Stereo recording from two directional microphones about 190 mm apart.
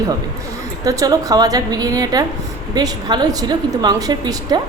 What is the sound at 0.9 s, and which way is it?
A woman's voice, 20° right (ahead or behind).